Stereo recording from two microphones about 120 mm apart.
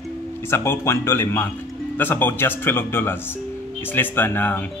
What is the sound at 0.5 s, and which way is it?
Speech, 20° left (ahead or behind).